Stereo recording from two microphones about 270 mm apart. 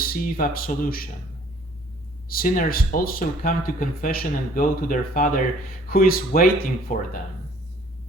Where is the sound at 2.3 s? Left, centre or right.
Left.